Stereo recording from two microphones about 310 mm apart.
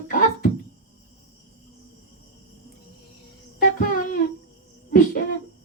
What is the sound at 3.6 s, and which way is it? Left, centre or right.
Music, left.